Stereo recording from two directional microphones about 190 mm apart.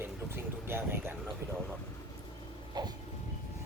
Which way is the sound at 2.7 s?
20° right (ahead or behind).